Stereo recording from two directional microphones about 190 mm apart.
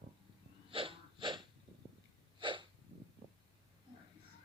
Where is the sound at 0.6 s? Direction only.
30° right (ahead or behind).